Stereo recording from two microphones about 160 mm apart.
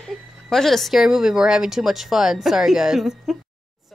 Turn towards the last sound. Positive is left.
turn(degrees=-5)  # may be behind; listen again after turning